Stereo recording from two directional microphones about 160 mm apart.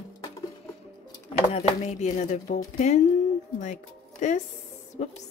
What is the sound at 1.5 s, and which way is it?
A woman's voice, 45° left (ahead or behind).